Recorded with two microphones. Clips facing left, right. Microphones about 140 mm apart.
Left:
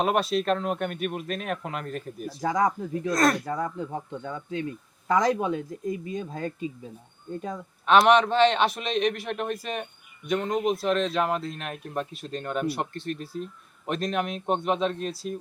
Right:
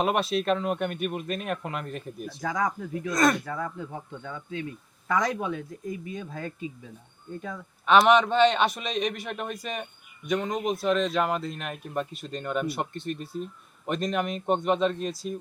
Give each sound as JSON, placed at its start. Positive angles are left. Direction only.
{"t": 0.0, "sound": "speech", "side_deg": 0}
{"t": 2.4, "sound": "speech", "side_deg": 25}
{"t": 3.1, "sound": "speech", "side_deg": 0}
{"t": 3.4, "sound": "speech", "side_deg": 40}
{"t": 5.0, "sound": "speech", "side_deg": 30}
{"t": 7.9, "sound": "speech", "side_deg": 0}